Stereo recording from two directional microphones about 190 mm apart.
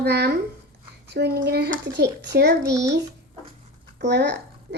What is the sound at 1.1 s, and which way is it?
A child's voice, 60° right (ahead or behind).